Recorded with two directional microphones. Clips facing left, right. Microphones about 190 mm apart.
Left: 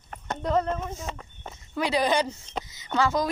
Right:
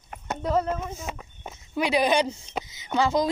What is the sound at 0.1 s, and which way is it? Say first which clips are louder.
A woman's voice: even; 5° right (ahead or behind).